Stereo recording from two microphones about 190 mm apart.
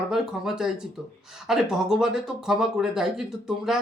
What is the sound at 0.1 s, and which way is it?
Speech, centre (ahead or behind).